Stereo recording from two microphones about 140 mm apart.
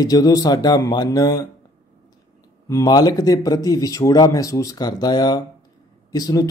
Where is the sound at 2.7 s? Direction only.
25° left (ahead or behind).